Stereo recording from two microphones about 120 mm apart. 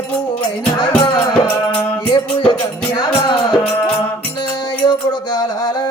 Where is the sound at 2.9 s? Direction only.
40° left (ahead or behind).